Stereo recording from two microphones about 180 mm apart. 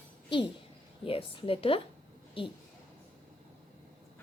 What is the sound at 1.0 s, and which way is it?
A woman's voice, 30° left (ahead or behind).